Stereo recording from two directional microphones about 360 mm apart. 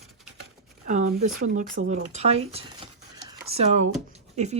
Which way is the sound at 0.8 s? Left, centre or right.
Centre.